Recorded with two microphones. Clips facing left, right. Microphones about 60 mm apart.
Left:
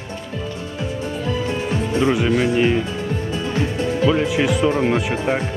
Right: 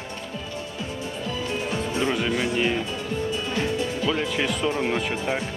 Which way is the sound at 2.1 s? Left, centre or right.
Centre.